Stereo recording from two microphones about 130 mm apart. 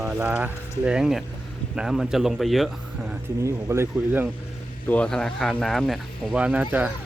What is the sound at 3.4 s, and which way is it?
Speech, 20° right (ahead or behind).